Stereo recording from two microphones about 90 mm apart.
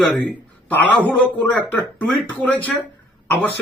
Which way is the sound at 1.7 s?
20° left (ahead or behind).